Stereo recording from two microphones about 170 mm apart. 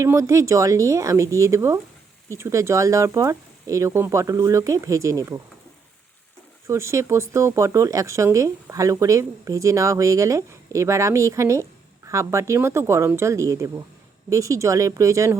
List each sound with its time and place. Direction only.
0.0 s speech: 20° right (ahead or behind)
6.7 s speech: 15° right (ahead or behind)